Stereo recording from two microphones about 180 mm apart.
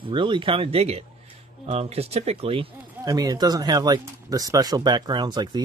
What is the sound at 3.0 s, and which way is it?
Speech, 20° right (ahead or behind).